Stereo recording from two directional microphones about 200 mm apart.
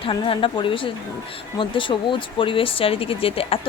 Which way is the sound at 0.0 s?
25° left (ahead or behind).